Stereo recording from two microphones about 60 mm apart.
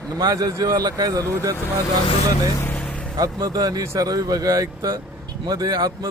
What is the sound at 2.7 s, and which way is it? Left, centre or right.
Vehicle, left.